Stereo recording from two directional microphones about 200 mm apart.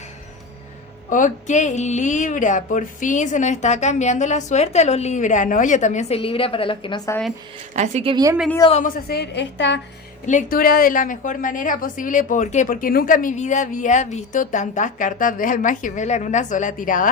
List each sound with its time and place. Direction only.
1.1 s a woman's voice: 40° left (ahead or behind); by 7.2 s 20° left (ahead or behind)
7.8 s a woman's voice: 30° right (ahead or behind)
9.0 s a woman's voice: 55° left (ahead or behind)
10.2 s a woman's voice: 40° left (ahead or behind)